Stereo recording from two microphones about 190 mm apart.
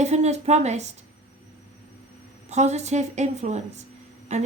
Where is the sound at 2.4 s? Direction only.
35° right (ahead or behind).